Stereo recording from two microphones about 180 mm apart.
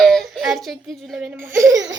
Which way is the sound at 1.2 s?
15° right (ahead or behind).